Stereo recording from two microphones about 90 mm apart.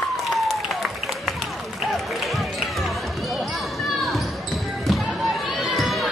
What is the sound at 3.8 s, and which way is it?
Basketball bounce, centre (ahead or behind).